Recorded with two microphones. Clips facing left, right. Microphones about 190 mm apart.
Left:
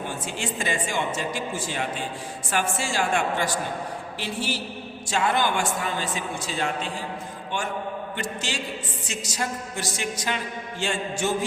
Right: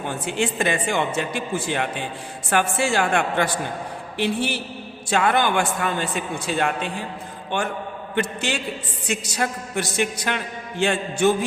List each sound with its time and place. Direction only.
0.1 s a man's voice: 60° right (ahead or behind)
8.1 s a man's voice: 60° right (ahead or behind)